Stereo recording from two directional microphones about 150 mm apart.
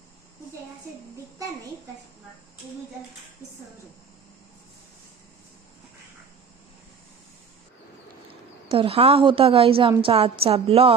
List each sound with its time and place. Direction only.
8.7 s a woman's voice: 40° right (ahead or behind)